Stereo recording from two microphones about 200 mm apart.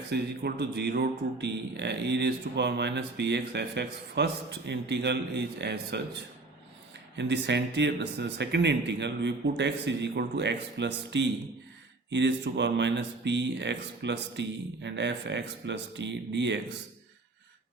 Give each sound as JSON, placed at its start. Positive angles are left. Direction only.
{"t": 0.1, "sound": "speech", "side_deg": -55}
{"t": 7.2, "sound": "speech", "side_deg": -60}